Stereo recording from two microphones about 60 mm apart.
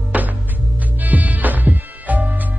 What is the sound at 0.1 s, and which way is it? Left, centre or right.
Music, right.